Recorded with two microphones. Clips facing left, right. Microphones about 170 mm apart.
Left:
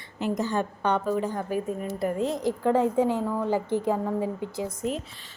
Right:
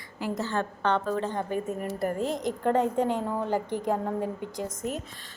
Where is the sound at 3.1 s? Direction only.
20° right (ahead or behind).